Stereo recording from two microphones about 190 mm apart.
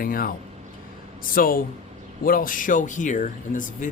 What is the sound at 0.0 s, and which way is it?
Speech, 50° left (ahead or behind).